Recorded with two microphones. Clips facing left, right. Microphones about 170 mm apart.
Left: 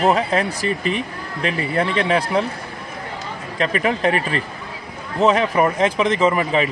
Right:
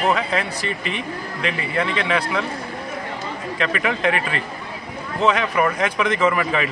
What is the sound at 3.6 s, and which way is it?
A man's voice, 35° left (ahead or behind).